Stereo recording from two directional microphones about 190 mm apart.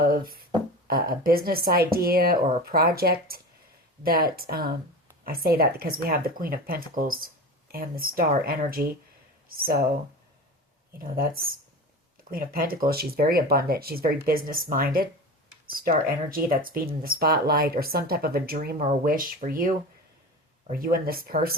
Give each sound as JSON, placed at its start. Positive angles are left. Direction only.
{"t": 0.0, "sound": "speech", "side_deg": -50}
{"t": 10.9, "sound": "speech", "side_deg": -50}